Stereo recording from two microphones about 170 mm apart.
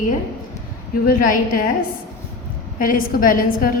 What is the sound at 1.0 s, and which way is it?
Speech, 55° left (ahead or behind).